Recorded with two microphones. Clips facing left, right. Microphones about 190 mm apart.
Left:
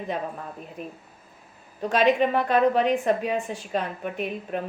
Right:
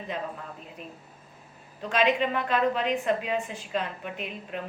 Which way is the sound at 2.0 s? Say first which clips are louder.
Left 4 dB; 45° left (ahead or behind).